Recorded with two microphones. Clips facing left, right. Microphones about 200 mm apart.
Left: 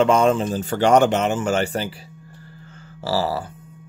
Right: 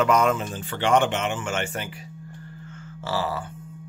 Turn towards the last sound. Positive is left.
turn(degrees=35)  # may be behind; listen again after turning